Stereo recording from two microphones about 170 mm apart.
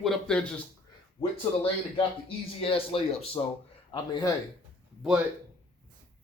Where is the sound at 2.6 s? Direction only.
35° left (ahead or behind).